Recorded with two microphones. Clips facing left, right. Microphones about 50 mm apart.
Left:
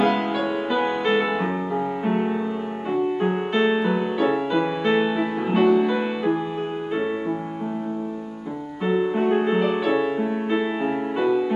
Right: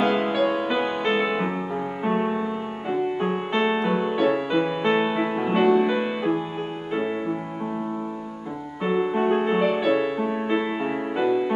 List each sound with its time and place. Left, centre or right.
0.0 s music: centre
8.8 s music: centre